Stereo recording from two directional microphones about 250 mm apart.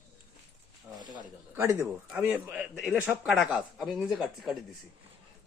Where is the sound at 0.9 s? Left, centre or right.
Centre.